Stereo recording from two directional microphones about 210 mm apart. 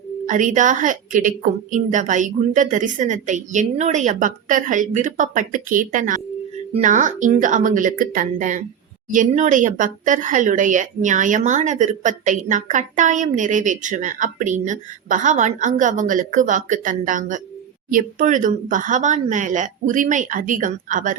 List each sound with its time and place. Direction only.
0.3 s speech: 40° right (ahead or behind)